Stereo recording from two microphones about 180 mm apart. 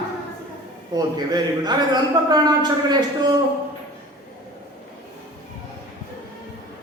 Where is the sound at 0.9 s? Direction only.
20° right (ahead or behind).